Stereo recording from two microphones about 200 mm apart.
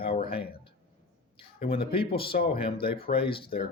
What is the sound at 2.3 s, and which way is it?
Speech, 40° left (ahead or behind).